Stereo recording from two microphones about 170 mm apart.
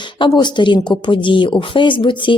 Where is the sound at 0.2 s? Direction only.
25° left (ahead or behind).